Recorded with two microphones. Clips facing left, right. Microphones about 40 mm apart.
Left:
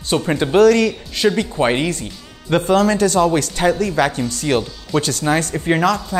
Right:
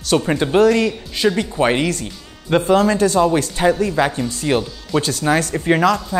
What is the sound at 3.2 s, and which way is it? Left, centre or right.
Speech, centre.